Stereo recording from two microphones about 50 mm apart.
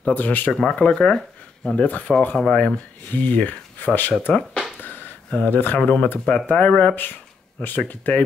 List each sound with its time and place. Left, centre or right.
0.1 s speech: left
0.5 s speech: centre
1.9 s speech: left
2.3 s speech: left
4.3 s speech: centre
4.7 s a sound: left
5.8 s speech: left
7.6 s speech: left